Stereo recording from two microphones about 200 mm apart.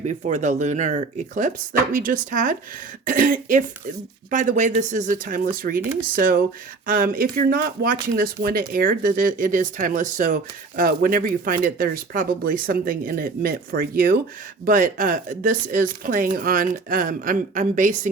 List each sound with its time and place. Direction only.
0.0 s speech: 35° right (ahead or behind)